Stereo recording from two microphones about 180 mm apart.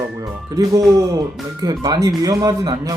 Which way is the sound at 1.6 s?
20° right (ahead or behind).